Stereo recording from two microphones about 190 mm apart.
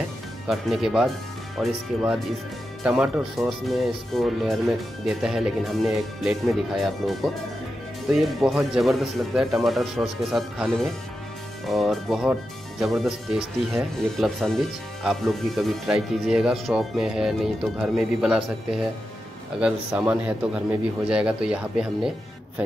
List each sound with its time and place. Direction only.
0.5 s speech: centre (ahead or behind)